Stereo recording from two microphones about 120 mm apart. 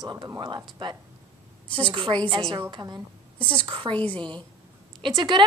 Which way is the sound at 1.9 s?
45° right (ahead or behind).